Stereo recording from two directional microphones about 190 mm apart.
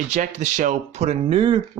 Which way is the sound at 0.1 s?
40° right (ahead or behind).